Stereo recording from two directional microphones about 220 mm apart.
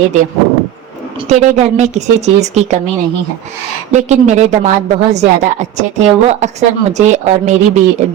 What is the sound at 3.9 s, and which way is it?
Speech, 30° right (ahead or behind).